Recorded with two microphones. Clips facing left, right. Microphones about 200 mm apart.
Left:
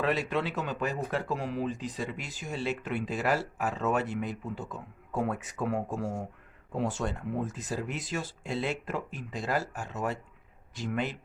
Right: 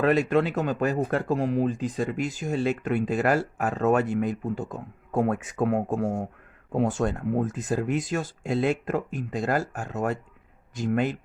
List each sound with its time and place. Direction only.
0.0 s speech: 50° right (ahead or behind)